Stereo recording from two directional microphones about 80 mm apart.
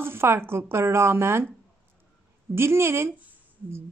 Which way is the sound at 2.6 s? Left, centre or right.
Right.